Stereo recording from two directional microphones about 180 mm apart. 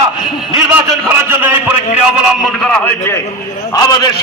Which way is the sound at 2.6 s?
10° left (ahead or behind).